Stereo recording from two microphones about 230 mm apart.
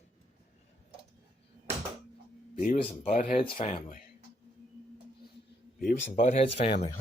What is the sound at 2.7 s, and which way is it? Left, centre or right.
Speech, left.